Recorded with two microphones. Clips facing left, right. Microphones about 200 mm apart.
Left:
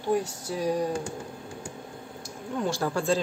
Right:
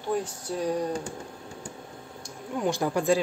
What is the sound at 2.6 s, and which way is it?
Speech, 15° right (ahead or behind).